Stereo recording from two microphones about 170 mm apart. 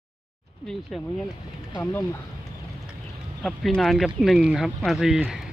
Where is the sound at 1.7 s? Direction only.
20° left (ahead or behind).